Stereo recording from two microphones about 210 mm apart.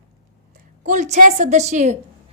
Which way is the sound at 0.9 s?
35° right (ahead or behind).